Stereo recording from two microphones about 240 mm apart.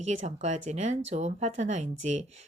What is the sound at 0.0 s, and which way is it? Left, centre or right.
Speech, right.